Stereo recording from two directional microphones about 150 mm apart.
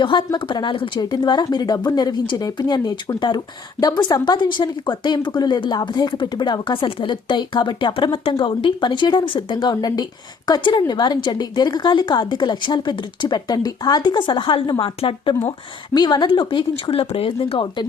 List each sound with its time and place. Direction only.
0.0 s a woman's voice: 30° left (ahead or behind)